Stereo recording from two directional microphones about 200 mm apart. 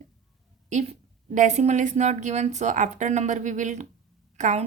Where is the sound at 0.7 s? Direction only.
35° right (ahead or behind).